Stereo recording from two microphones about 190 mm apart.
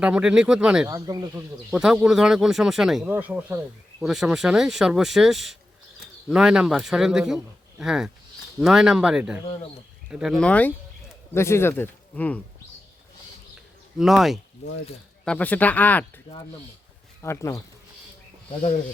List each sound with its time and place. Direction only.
0.0 s speech: 5° right (ahead or behind)
0.9 s speech: 20° right (ahead or behind)
1.7 s speech: 5° right (ahead or behind)
14.0 s speech: centre (ahead or behind)
17.2 s speech: 15° left (ahead or behind)